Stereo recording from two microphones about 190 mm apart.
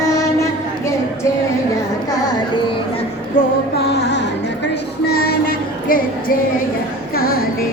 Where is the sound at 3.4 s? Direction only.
45° left (ahead or behind).